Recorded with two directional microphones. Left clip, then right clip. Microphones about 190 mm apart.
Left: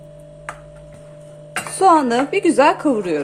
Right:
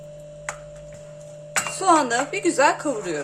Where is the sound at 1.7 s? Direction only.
35° left (ahead or behind).